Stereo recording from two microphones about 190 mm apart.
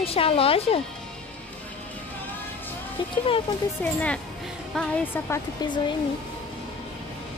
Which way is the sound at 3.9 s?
5° left (ahead or behind).